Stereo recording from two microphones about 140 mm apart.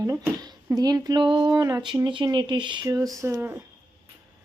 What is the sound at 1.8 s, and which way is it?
Speech, 35° right (ahead or behind).